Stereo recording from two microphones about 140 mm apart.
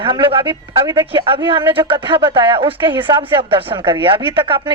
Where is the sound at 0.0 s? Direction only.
40° right (ahead or behind).